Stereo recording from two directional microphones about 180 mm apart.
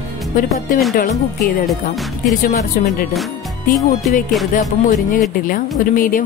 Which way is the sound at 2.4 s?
50° left (ahead or behind).